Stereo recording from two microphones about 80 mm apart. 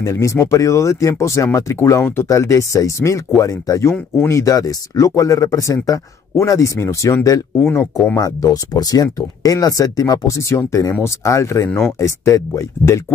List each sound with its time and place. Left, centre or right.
0.0 s speech: left
7.7 s speech: left
8.2 s speech: left